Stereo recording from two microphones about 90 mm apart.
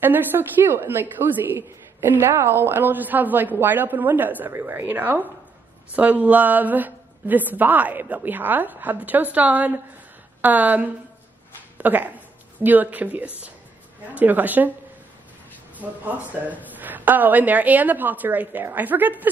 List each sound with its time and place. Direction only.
0.0 s a woman's voice: 20° right (ahead or behind)
15.8 s a woman's voice: 20° right (ahead or behind)